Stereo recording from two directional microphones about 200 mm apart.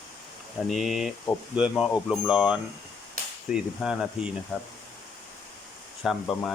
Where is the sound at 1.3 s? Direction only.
25° left (ahead or behind).